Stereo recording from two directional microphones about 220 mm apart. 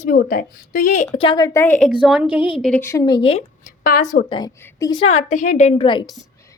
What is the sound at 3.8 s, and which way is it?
Speech, 35° left (ahead or behind).